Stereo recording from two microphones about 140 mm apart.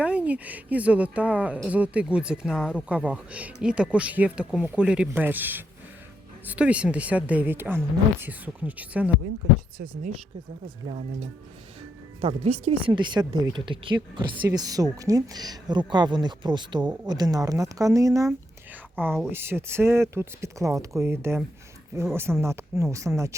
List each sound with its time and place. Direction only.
0.0 s speech: 10° right (ahead or behind)
10.8 s speech: 55° right (ahead or behind)
12.2 s speech: 40° right (ahead or behind); by 18.3 s 25° right (ahead or behind)
18.3 s whispering: 15° right (ahead or behind)
19.3 s speech: 15° right (ahead or behind)